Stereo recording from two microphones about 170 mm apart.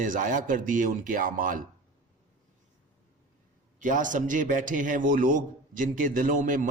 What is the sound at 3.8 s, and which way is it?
A man's voice, 50° right (ahead or behind).